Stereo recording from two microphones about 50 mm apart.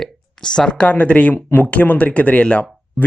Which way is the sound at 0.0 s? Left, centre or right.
Centre.